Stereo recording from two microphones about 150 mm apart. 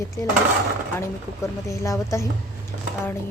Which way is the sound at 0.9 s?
20° left (ahead or behind).